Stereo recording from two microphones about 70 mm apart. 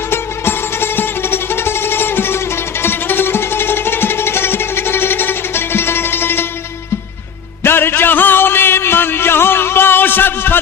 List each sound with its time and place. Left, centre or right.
0.1 s music: left
7.6 s music: left